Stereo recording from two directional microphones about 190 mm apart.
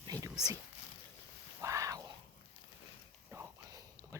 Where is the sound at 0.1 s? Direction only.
20° right (ahead or behind).